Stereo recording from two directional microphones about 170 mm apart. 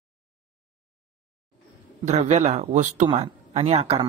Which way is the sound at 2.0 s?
45° right (ahead or behind).